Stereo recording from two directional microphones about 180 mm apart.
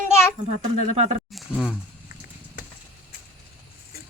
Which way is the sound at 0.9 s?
40° right (ahead or behind).